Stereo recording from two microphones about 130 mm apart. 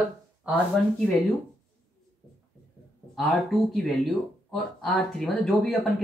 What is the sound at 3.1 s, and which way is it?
Speech, centre (ahead or behind).